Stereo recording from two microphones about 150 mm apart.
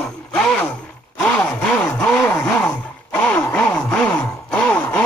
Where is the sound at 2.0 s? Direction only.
10° left (ahead or behind).